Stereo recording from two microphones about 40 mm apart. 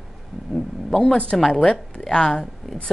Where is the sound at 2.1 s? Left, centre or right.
Left.